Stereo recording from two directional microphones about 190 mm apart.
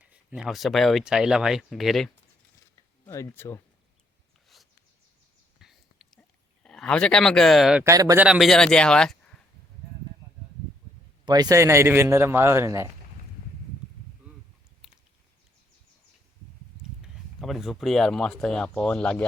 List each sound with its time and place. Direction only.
0.0 s speech: 5° right (ahead or behind)
3.0 s speech: 15° left (ahead or behind)
5.5 s a sound: centre (ahead or behind)
6.6 s speech: 5° left (ahead or behind)
7.9 s a man's voice: 15° right (ahead or behind)
8.2 s speech: centre (ahead or behind)
11.3 s a man's voice: 20° right (ahead or behind)
17.0 s speech: centre (ahead or behind)